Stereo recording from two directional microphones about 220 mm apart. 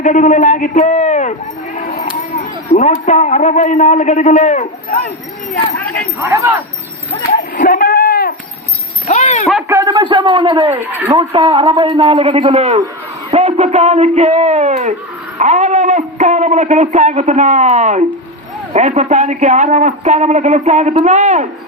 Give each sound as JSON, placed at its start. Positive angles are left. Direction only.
{"t": 0.0, "sound": "a man's voice", "side_deg": 35}
{"t": 1.8, "sound": "a sound", "side_deg": 35}
{"t": 2.7, "sound": "a man's voice", "side_deg": 35}
{"t": 6.2, "sound": "speech", "side_deg": -15}
{"t": 7.3, "sound": "a man's voice", "side_deg": 40}
{"t": 9.6, "sound": "a man's voice", "side_deg": -15}
{"t": 10.8, "sound": "speech", "side_deg": -10}
{"t": 11.2, "sound": "a man's voice", "side_deg": -25}